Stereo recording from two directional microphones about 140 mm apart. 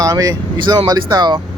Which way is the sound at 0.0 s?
25° right (ahead or behind).